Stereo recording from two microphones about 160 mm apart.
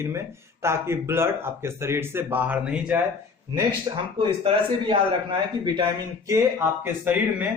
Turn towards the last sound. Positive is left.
turn(degrees=-10)  # may be behind; listen again after turning